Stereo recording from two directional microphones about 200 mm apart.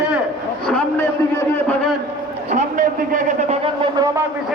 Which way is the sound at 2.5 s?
40° right (ahead or behind).